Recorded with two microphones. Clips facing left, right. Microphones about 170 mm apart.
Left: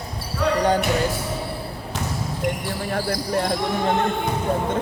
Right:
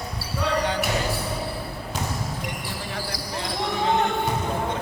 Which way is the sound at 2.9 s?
50° left (ahead or behind).